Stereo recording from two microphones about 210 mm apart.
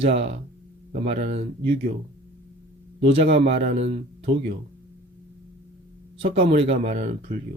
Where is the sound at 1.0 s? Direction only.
30° right (ahead or behind).